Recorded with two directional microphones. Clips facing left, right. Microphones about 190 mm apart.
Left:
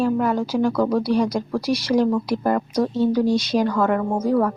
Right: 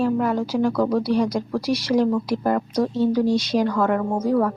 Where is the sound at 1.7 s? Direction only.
30° right (ahead or behind).